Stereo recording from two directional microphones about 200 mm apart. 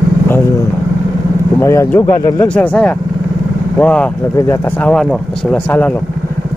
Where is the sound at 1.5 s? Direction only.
15° left (ahead or behind).